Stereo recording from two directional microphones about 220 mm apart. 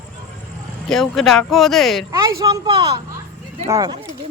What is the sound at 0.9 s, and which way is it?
Speech, centre (ahead or behind).